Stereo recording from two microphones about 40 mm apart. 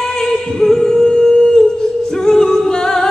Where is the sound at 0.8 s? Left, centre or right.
Centre.